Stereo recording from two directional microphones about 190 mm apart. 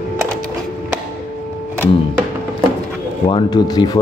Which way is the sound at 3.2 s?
25° left (ahead or behind).